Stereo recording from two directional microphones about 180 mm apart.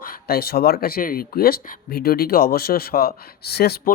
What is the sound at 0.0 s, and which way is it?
Speech, 55° left (ahead or behind).